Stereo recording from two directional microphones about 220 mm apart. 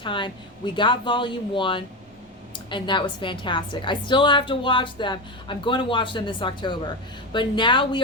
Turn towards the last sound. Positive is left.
turn(degrees=20)  # may be behind; listen again after turning